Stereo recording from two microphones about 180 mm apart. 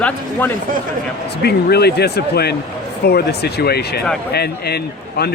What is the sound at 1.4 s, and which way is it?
Speech, 65° left (ahead or behind).